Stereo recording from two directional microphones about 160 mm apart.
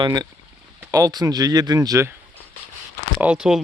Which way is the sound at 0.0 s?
25° right (ahead or behind).